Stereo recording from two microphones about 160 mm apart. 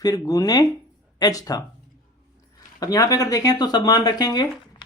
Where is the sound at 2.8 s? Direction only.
20° left (ahead or behind).